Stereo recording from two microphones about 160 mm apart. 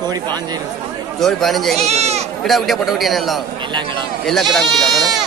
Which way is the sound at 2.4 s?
Centre (ahead or behind).